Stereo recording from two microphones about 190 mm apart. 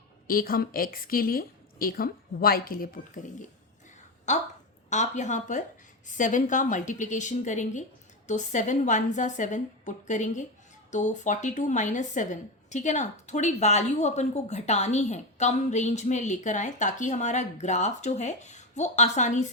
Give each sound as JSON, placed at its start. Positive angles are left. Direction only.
{"t": 0.3, "sound": "a woman's voice", "side_deg": 50}